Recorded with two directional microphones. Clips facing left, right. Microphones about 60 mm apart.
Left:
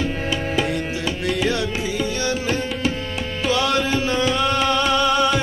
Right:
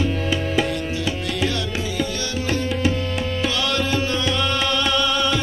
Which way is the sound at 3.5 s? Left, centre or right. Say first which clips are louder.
Left 6 dB; left.